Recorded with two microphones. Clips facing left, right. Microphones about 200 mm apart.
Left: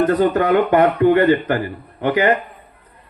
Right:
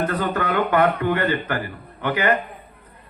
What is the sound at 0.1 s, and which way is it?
A man's voice, 20° left (ahead or behind).